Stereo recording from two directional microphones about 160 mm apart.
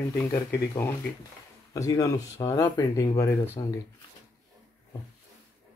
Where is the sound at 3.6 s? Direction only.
30° left (ahead or behind).